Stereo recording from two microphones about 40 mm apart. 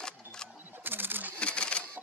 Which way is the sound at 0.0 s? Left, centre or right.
Centre.